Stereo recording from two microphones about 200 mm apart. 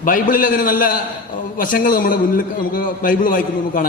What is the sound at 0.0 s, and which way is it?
A man's voice, 40° left (ahead or behind).